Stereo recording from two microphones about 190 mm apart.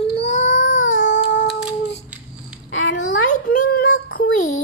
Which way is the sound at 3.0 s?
45° left (ahead or behind).